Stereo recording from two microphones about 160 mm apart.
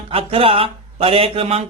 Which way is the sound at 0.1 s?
35° right (ahead or behind).